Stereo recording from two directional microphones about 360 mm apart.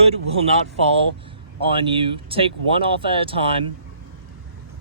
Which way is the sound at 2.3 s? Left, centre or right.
Centre.